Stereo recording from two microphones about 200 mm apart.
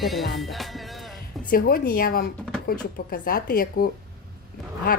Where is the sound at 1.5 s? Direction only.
45° left (ahead or behind).